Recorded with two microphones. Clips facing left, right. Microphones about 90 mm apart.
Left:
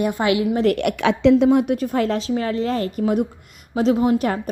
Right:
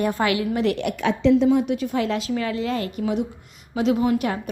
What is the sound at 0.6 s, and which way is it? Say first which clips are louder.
Speech: left 4 dB; 60° left (ahead or behind).